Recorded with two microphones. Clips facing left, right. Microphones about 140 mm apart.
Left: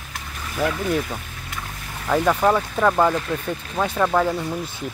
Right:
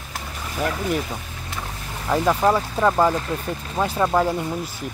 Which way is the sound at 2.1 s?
5° right (ahead or behind).